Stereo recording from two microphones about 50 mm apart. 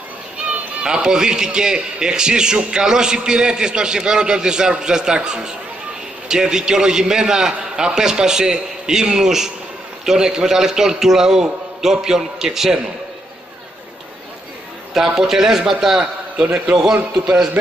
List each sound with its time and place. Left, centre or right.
0.8 s a man's voice: centre
15.0 s a man's voice: centre
16.4 s a man's voice: right
16.7 s a man's voice: centre